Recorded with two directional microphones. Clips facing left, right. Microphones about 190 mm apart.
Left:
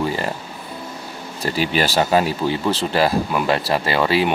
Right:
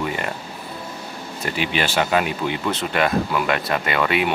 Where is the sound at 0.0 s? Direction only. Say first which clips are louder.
Left 3 dB; 30° left (ahead or behind).